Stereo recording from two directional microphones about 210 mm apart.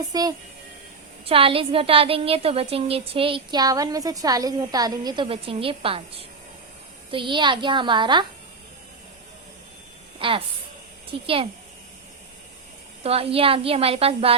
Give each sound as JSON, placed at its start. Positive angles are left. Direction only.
{"t": 0.0, "sound": "a woman's voice", "side_deg": -15}
{"t": 7.1, "sound": "a woman's voice", "side_deg": -25}
{"t": 10.2, "sound": "a woman's voice", "side_deg": -25}
{"t": 13.0, "sound": "a woman's voice", "side_deg": -30}